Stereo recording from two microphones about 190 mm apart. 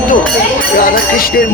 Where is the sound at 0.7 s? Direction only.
50° left (ahead or behind).